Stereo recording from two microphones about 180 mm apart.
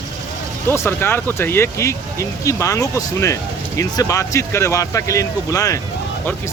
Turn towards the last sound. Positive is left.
turn(degrees=20)  # may be behind; listen again after turning